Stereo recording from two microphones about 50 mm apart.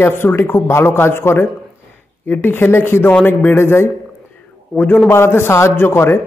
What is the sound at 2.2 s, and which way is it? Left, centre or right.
A man's voice, left.